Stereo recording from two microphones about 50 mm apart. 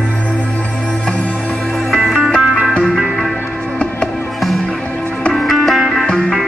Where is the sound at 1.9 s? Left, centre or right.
Centre.